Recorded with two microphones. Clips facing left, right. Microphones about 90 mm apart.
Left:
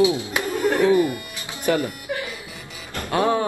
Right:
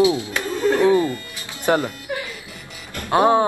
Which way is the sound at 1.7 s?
40° right (ahead or behind).